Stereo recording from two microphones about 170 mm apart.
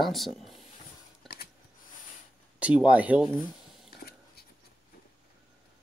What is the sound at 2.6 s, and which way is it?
Speech, 5° right (ahead or behind).